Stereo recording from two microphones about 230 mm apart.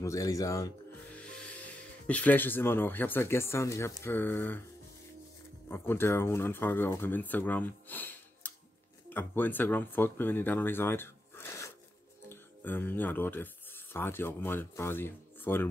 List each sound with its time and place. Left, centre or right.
0.0 s speech: centre
5.7 s speech: centre